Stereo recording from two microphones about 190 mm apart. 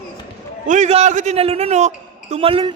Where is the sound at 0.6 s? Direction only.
40° right (ahead or behind).